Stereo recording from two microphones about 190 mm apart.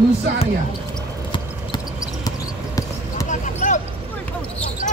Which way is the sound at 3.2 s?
40° left (ahead or behind).